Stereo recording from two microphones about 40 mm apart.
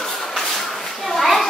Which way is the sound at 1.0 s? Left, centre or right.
Centre.